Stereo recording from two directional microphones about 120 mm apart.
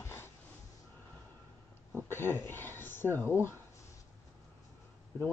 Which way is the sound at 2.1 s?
20° left (ahead or behind).